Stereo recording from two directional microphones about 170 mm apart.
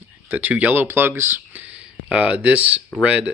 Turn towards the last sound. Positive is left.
turn(degrees=-5)  # may be behind; listen again after turning